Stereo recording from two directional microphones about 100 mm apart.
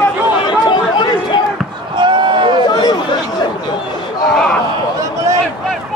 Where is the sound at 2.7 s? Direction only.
45° left (ahead or behind).